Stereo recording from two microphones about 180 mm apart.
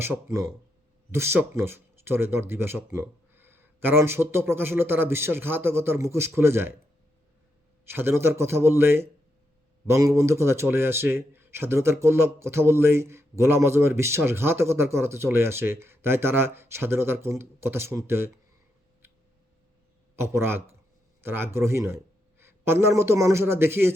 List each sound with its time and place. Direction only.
0.3 s a man's voice: 15° right (ahead or behind)
7.9 s a man's voice: 10° right (ahead or behind)
20.1 s a man's voice: 15° right (ahead or behind)